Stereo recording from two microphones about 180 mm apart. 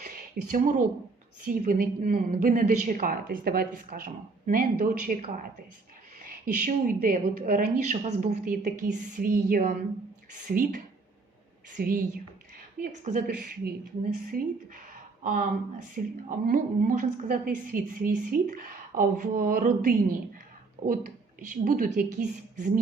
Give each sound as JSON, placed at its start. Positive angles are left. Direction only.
{"t": 0.5, "sound": "a woman's voice", "side_deg": -45}
{"t": 11.8, "sound": "a woman's voice", "side_deg": -50}
{"t": 13.2, "sound": "a woman's voice", "side_deg": -60}